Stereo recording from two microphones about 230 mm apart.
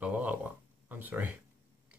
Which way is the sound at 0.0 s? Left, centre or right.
Centre.